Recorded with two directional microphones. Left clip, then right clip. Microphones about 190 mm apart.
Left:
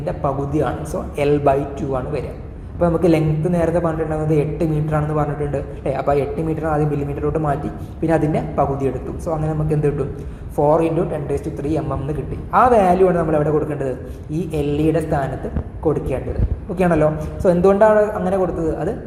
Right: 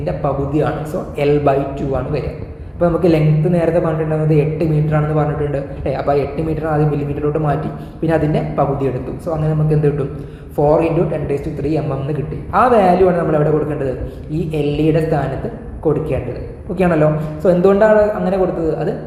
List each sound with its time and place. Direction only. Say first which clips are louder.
0.0 s a man's voice: right 3 dB; 25° left (ahead or behind)
16.7 s a man's voice: right 2 dB; 25° left (ahead or behind)